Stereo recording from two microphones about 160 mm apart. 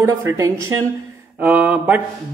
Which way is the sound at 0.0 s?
15° right (ahead or behind).